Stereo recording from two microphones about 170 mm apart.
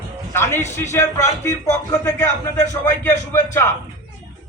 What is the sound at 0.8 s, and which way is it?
Speech, 15° left (ahead or behind).